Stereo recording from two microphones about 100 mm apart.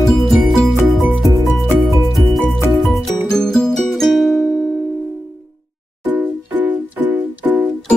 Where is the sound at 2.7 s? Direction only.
Centre (ahead or behind).